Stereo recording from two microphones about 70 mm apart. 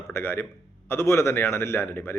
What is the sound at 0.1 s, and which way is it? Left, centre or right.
A man's voice, left.